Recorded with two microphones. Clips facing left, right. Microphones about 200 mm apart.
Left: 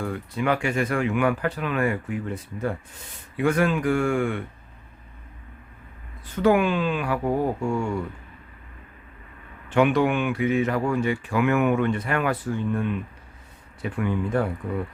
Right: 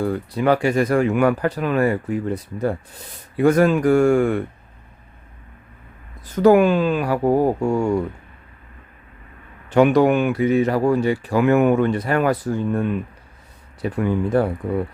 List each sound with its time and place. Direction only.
0.0 s speech: 35° right (ahead or behind)
6.3 s speech: 40° right (ahead or behind)
9.6 s speech: 40° right (ahead or behind)